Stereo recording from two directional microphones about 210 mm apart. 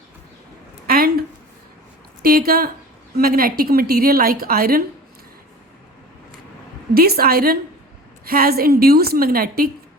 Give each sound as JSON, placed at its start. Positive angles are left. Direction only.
{"t": 0.9, "sound": "a sound", "side_deg": -45}
{"t": 2.2, "sound": "a woman's voice", "side_deg": -45}
{"t": 6.9, "sound": "a woman's voice", "side_deg": -45}